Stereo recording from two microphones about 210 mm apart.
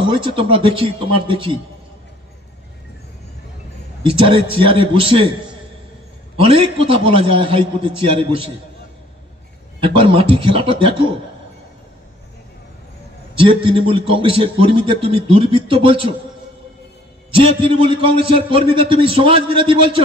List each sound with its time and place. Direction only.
0.0 s a man's voice: 25° right (ahead or behind)
4.0 s a man's voice: 25° right (ahead or behind)
6.3 s a man's voice: 25° right (ahead or behind)
9.8 s a man's voice: 25° right (ahead or behind)
13.3 s a man's voice: 25° right (ahead or behind)
17.3 s a man's voice: 25° right (ahead or behind)